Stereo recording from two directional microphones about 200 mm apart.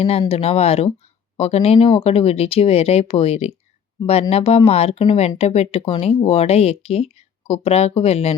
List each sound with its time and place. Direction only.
0.0 s speech: 30° left (ahead or behind)